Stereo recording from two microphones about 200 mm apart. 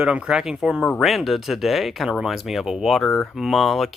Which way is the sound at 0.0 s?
5° right (ahead or behind).